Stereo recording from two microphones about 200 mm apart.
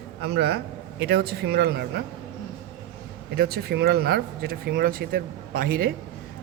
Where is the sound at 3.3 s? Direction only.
50° right (ahead or behind).